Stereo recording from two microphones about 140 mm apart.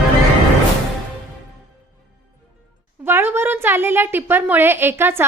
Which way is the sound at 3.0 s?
15° right (ahead or behind).